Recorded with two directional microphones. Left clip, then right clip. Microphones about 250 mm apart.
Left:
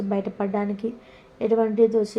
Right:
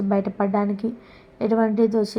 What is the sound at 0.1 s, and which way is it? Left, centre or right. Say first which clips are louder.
A woman's voice: right 4 dB; centre.